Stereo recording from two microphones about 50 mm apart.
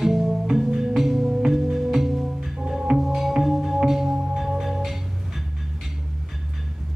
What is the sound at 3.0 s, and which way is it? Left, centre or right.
Music, centre.